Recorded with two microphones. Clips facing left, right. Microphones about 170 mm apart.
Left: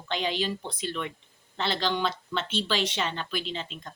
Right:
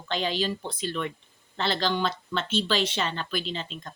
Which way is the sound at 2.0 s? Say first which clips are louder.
Right 1 dB; 10° left (ahead or behind).